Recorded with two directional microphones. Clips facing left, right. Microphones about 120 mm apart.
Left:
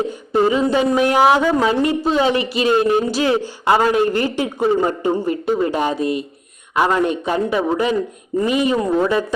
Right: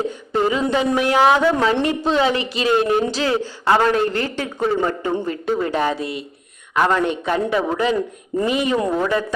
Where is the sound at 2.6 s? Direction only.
25° left (ahead or behind).